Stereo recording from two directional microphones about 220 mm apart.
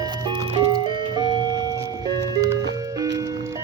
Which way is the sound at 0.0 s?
20° right (ahead or behind).